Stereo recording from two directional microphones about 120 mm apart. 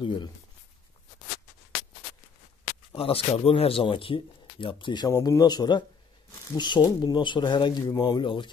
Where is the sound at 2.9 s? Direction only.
50° left (ahead or behind).